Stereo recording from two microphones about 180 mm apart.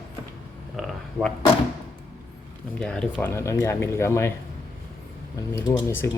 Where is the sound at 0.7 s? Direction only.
Centre (ahead or behind).